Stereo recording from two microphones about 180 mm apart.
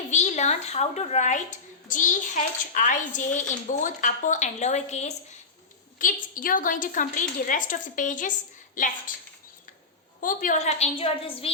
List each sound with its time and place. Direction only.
0.1 s a woman's voice: 40° left (ahead or behind)
10.2 s a woman's voice: 45° left (ahead or behind)